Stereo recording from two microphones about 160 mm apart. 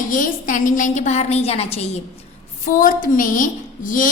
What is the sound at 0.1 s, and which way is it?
A woman's voice, 55° left (ahead or behind).